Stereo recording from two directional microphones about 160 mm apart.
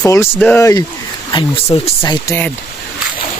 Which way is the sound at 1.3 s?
35° left (ahead or behind).